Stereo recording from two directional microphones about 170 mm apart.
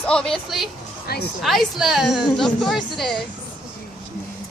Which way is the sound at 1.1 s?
65° left (ahead or behind).